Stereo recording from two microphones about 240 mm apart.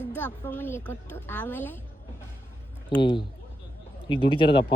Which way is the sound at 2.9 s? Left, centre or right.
Centre.